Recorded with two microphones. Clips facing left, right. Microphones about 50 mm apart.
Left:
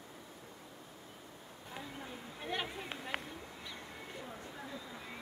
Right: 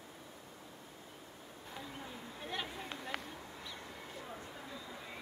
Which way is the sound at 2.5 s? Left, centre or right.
Left.